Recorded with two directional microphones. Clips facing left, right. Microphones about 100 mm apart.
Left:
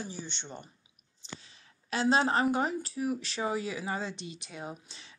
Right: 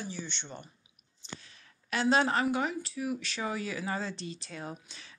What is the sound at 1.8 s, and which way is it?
Speech, 30° left (ahead or behind).